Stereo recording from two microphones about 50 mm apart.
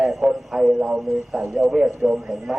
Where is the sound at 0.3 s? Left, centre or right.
Centre.